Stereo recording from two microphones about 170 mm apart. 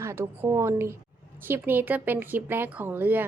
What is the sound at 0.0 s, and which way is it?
A woman's voice, 15° right (ahead or behind).